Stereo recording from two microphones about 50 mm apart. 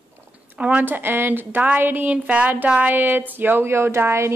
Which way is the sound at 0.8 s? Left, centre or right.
Right.